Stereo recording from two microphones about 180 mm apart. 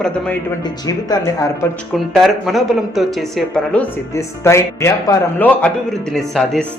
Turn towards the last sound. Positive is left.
turn(degrees=0)  # may be behind; listen again after turning